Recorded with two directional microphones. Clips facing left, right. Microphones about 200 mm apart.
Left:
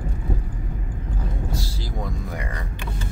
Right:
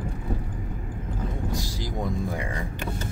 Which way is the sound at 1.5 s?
15° right (ahead or behind).